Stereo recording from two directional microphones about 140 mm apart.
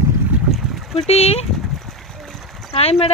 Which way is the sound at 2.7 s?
45° left (ahead or behind).